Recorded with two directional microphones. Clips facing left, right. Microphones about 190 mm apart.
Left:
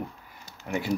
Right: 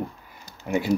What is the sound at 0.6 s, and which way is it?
Speech, 20° right (ahead or behind).